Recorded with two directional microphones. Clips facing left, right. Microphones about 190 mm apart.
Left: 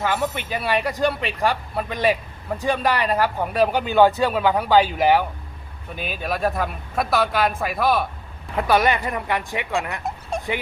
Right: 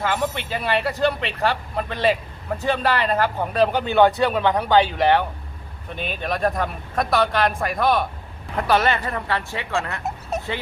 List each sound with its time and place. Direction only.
0.0 s a man's voice: 10° left (ahead or behind)
10.0 s dog: 5° right (ahead or behind)